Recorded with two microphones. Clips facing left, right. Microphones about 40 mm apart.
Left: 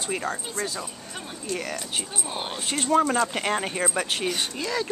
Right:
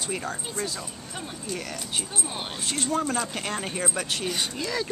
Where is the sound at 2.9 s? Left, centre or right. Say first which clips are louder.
Left 7 dB; left.